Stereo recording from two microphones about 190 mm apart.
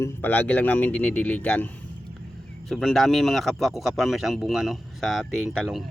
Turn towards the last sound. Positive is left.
turn(degrees=0)  # may be behind; listen again after turning